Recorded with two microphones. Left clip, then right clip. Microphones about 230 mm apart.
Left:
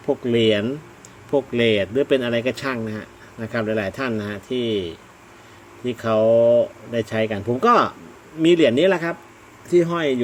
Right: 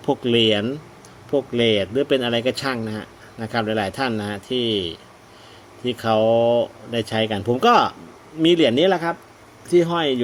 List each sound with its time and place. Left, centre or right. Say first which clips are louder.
0.3 s speech: even; centre
1.3 s speech: even; centre